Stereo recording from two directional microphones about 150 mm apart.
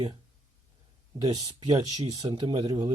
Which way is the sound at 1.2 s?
25° right (ahead or behind).